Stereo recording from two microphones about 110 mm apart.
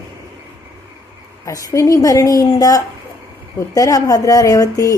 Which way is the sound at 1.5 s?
30° left (ahead or behind).